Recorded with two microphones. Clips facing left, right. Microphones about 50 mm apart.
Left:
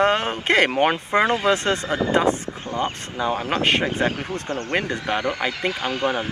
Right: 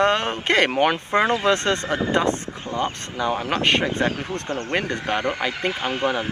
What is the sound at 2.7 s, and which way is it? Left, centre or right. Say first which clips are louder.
Speech: even; left.